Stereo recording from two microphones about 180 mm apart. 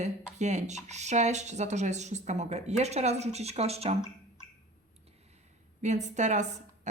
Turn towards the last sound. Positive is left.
turn(degrees=-40)  # may be behind; listen again after turning